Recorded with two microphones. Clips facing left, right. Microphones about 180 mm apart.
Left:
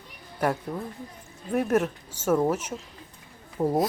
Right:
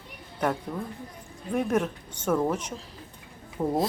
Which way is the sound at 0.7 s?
5° left (ahead or behind).